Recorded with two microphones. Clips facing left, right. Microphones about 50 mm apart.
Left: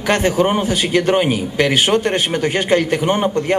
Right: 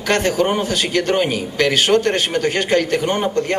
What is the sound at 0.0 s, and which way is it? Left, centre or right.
A man's voice, centre.